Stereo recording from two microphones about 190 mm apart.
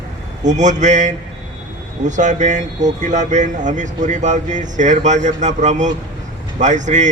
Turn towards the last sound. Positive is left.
turn(degrees=-40)  # may be behind; listen again after turning